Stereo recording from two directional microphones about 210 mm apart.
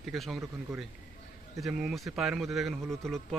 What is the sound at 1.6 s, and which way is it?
Speech, 5° right (ahead or behind).